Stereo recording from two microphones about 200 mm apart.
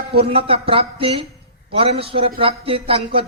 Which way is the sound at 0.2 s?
30° right (ahead or behind).